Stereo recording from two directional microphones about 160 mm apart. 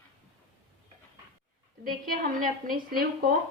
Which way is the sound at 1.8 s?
60° right (ahead or behind).